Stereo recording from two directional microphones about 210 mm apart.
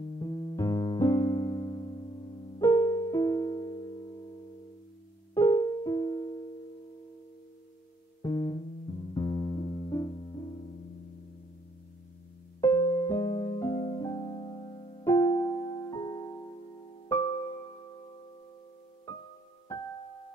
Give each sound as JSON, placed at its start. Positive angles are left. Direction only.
{"t": 0.2, "sound": "music", "side_deg": 20}
{"t": 5.3, "sound": "music", "side_deg": 15}
{"t": 8.2, "sound": "music", "side_deg": 15}
{"t": 12.5, "sound": "music", "side_deg": 15}
{"t": 19.7, "sound": "keyboard", "side_deg": 15}